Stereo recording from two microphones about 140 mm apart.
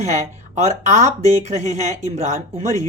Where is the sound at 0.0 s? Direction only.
55° right (ahead or behind).